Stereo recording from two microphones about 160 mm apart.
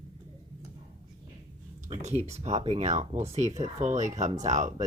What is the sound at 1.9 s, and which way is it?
Speech, 40° right (ahead or behind).